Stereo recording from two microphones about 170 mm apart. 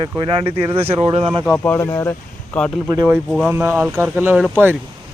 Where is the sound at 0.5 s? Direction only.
10° right (ahead or behind).